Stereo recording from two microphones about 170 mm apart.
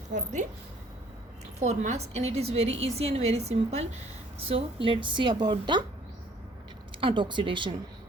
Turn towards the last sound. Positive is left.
turn(degrees=-30)  # may be behind; listen again after turning